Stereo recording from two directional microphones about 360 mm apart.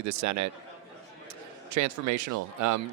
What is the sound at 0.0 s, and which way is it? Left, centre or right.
Speech, right.